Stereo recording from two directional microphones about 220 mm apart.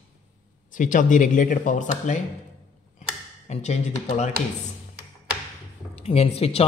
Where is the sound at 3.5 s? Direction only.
30° left (ahead or behind).